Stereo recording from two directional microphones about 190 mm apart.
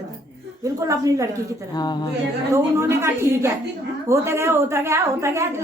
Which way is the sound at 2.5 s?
15° right (ahead or behind).